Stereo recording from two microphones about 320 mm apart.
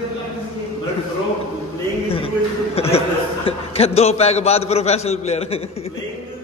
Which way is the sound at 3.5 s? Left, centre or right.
Centre.